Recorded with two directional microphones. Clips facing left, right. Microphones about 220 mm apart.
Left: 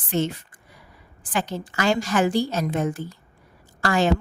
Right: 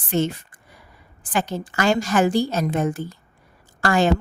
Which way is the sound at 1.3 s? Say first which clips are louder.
Right 3 dB; 50° right (ahead or behind).